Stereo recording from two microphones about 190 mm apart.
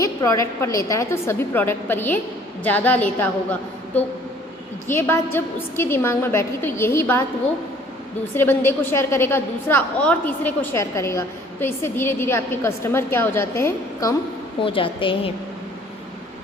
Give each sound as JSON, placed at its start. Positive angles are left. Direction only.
{"t": 0.0, "sound": "a woman's voice", "side_deg": 15}
{"t": 8.3, "sound": "a woman's voice", "side_deg": 10}
{"t": 14.6, "sound": "a woman's voice", "side_deg": 30}